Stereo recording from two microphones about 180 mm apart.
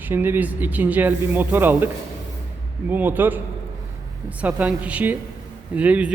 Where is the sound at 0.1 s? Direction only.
10° right (ahead or behind).